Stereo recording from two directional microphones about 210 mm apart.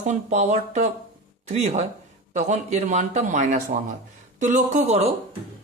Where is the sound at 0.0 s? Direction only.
35° right (ahead or behind).